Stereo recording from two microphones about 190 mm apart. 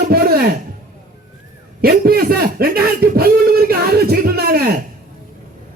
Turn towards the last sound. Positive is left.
turn(degrees=-55)  # may be behind; listen again after turning